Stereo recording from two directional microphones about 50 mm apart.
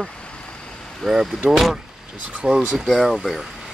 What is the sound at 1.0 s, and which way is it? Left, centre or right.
Speech, centre.